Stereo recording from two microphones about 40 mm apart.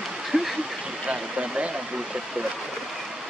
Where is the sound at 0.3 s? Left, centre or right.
Centre.